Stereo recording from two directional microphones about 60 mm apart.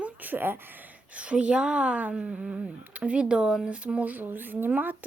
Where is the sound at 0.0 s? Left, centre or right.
Right.